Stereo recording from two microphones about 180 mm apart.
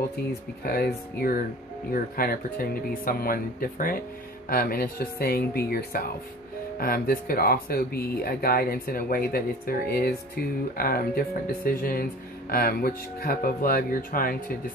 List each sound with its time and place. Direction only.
0.7 s speech: 55° left (ahead or behind)